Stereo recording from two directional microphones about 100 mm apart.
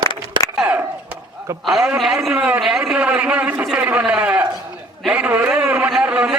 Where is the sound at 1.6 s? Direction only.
Centre (ahead or behind).